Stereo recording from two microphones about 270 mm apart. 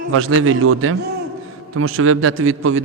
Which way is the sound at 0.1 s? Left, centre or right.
Right.